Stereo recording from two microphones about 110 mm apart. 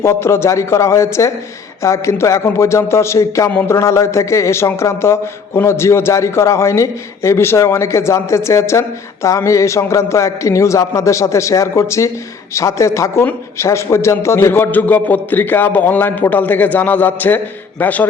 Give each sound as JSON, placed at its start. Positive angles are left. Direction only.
{"t": 0.0, "sound": "a man's voice", "side_deg": 25}